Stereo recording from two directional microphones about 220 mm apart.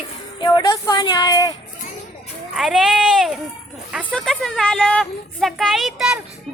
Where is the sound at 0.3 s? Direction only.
20° left (ahead or behind).